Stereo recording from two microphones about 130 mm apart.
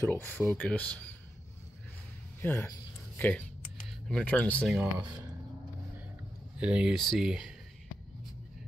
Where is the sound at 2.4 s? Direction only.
15° left (ahead or behind).